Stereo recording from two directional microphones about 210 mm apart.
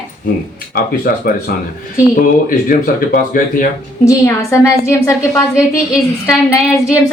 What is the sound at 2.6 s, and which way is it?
Speech, 40° left (ahead or behind).